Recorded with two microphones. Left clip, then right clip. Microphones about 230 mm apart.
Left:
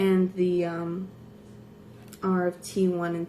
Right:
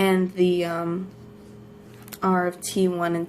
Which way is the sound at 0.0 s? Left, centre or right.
Right.